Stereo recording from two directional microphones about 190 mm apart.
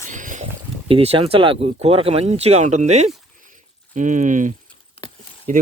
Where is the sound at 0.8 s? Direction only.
30° right (ahead or behind).